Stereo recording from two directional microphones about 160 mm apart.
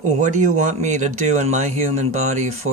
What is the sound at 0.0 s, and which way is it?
Speech, 50° right (ahead or behind).